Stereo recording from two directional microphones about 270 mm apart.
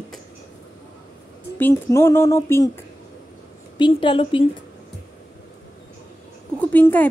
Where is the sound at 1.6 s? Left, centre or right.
Centre.